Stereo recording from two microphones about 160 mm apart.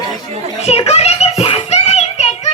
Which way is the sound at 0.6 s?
40° left (ahead or behind).